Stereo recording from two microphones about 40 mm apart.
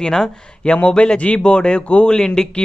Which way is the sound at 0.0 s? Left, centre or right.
Centre.